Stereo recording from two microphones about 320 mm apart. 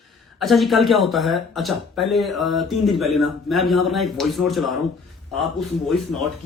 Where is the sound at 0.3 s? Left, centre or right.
Centre.